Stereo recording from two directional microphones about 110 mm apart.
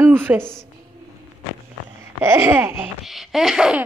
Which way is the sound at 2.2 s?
25° right (ahead or behind).